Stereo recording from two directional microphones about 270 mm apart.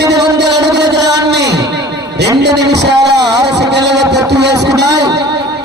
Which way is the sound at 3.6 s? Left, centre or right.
Right.